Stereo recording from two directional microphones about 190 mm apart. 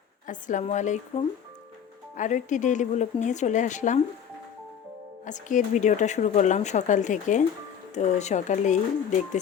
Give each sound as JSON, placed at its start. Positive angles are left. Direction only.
{"t": 0.3, "sound": "speech", "side_deg": 40}
{"t": 5.2, "sound": "speech", "side_deg": 40}